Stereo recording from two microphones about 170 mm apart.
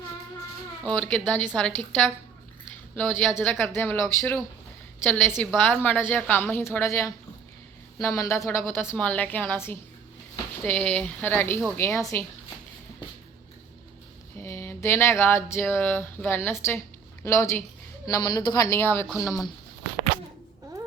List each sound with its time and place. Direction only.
0.9 s speech: 5° left (ahead or behind)
4.2 s speech: centre (ahead or behind); by 12.2 s 15° left (ahead or behind)
14.3 s speech: 15° left (ahead or behind)
19.0 s speech: centre (ahead or behind)